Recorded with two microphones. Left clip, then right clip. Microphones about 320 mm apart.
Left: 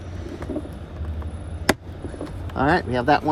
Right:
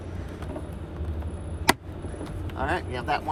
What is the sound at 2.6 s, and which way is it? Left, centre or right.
Speech, left.